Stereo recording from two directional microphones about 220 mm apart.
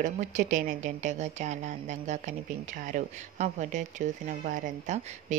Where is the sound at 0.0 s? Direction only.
35° right (ahead or behind).